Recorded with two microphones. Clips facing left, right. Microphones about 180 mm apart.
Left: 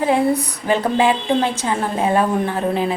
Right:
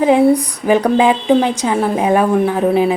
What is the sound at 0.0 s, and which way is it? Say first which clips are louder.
A woman's voice: right 6 dB; 15° right (ahead or behind).